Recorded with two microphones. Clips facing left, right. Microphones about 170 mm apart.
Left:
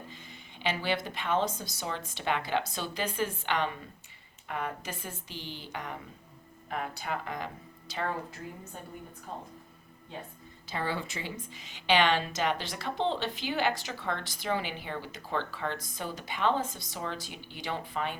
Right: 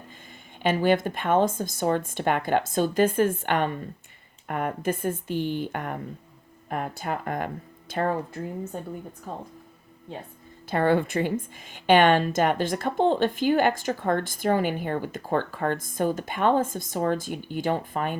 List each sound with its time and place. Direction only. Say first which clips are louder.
0.6 s a woman's voice: right 10 dB; 50° right (ahead or behind)
10.7 s a woman's voice: right 12 dB; 55° right (ahead or behind)